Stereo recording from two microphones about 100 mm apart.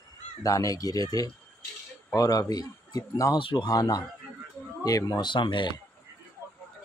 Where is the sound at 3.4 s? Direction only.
55° left (ahead or behind).